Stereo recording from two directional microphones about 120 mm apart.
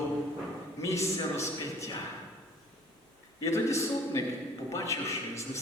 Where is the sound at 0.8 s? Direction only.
25° left (ahead or behind).